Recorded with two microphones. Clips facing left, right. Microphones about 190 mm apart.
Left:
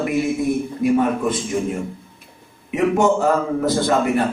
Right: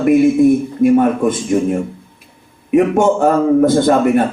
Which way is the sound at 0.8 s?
50° right (ahead or behind).